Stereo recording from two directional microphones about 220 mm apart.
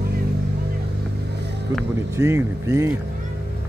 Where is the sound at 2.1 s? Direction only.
15° right (ahead or behind).